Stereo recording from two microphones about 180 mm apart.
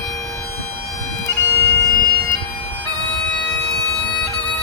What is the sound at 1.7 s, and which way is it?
Bagpipes, 15° left (ahead or behind).